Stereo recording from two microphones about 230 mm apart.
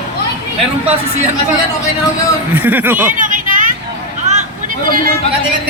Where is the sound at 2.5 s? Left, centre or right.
Centre.